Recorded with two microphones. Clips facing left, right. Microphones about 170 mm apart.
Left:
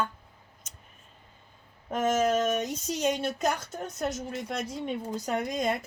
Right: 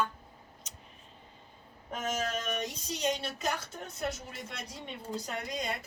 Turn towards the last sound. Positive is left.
turn(degrees=50)  # may be behind; listen again after turning